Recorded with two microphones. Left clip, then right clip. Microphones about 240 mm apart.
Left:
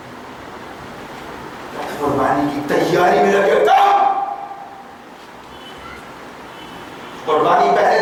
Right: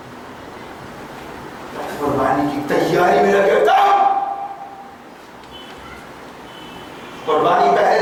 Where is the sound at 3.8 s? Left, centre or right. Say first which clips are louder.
Even; centre.